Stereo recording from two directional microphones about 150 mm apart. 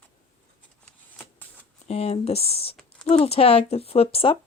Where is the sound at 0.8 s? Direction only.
10° left (ahead or behind).